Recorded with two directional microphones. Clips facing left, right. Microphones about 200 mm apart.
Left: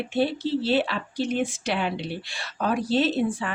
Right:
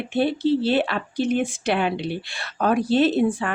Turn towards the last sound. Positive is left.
turn(degrees=-55)  # may be behind; listen again after turning